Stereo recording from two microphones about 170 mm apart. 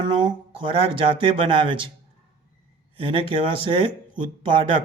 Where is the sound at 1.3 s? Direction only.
30° right (ahead or behind).